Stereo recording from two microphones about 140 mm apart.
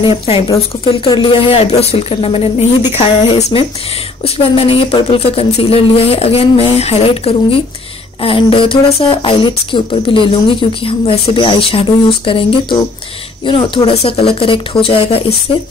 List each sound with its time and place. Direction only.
0.0 s speech: 40° left (ahead or behind)